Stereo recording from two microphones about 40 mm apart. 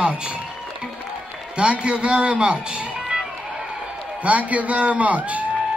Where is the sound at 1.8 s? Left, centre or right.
Right.